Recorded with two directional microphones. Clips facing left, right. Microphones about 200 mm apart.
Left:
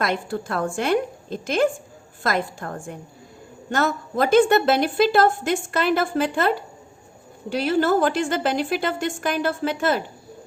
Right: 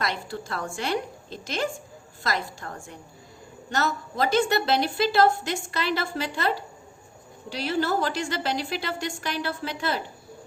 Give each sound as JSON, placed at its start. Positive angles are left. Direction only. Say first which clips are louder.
{"t": 0.0, "sound": "a woman's voice", "louder": "left 6 dB", "side_deg": 55}